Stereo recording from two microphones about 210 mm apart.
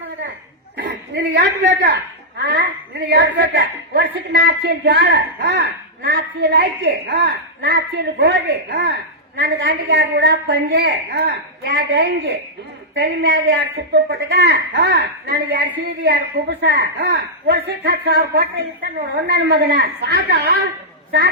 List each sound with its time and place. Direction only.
0.8 s a woman's voice: 50° right (ahead or behind)